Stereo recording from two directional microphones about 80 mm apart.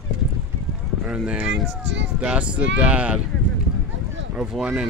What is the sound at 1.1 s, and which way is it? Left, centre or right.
Speech, centre.